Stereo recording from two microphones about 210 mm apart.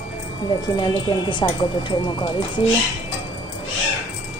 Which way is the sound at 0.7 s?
20° left (ahead or behind).